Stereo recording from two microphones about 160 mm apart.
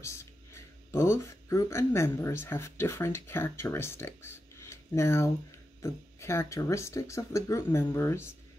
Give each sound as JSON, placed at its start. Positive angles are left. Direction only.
{"t": 0.0, "sound": "speech", "side_deg": 15}